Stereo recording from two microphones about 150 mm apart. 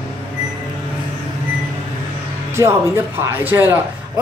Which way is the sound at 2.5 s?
15° right (ahead or behind).